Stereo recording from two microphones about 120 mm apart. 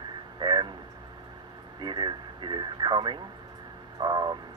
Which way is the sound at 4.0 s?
35° right (ahead or behind).